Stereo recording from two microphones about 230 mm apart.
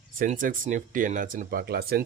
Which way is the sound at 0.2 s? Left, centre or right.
Right.